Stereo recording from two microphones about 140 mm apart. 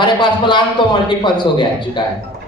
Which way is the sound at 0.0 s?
35° left (ahead or behind).